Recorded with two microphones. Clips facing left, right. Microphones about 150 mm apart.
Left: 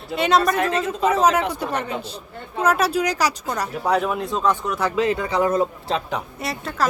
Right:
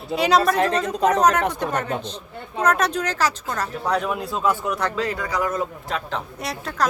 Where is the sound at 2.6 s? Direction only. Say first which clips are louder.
Left 1 dB; 5° left (ahead or behind).